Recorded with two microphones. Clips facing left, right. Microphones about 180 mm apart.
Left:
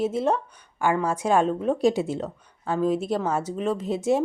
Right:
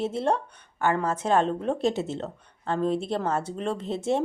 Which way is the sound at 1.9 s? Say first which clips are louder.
Left 3 dB; 25° right (ahead or behind).